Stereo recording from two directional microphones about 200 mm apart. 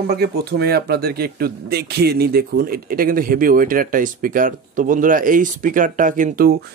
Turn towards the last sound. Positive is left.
turn(degrees=-45)  # may be behind; listen again after turning